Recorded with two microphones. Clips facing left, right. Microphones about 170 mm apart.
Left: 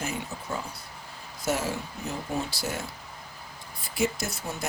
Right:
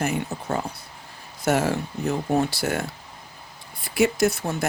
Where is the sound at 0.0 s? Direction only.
65° right (ahead or behind).